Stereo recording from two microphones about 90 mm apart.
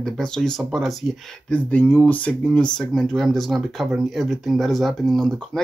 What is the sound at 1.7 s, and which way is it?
Speech, 20° left (ahead or behind).